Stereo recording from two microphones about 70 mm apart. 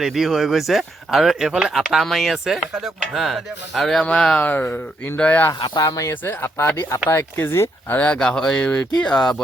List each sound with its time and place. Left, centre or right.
0.0 s speech: centre
4.0 s speech: centre
5.5 s speech: left
5.8 s speech: left
7.9 s speech: left
8.2 s speech: centre
9.1 s speech: centre